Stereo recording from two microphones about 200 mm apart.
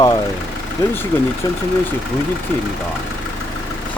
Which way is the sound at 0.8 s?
15° left (ahead or behind).